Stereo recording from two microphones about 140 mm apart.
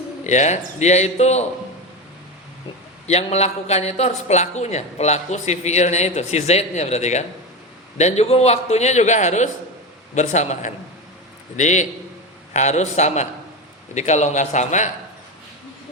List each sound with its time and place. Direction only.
0.3 s speech: 55° left (ahead or behind)
3.1 s a man's voice: 50° left (ahead or behind)